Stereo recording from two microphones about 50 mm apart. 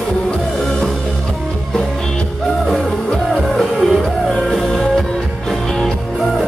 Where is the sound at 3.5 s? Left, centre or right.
Centre.